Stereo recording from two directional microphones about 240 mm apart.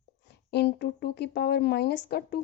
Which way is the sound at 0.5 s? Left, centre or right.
Left.